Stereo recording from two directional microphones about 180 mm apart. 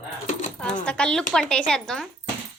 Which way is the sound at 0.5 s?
5° left (ahead or behind).